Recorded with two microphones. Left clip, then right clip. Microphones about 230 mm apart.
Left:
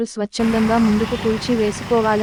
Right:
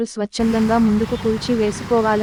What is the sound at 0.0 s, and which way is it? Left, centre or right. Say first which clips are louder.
Speech: even; centre.